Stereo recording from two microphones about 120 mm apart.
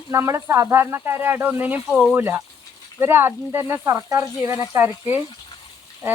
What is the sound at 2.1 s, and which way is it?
Speech, 20° right (ahead or behind).